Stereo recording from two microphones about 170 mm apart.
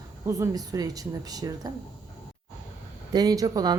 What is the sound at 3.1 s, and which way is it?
Speech, 20° right (ahead or behind).